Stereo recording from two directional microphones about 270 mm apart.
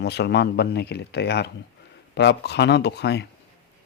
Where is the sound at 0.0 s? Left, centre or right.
Left.